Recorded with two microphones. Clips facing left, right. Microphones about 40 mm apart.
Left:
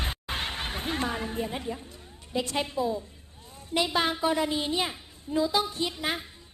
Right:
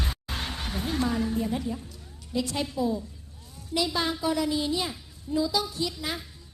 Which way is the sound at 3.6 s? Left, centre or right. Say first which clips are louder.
Left 1 dB; left.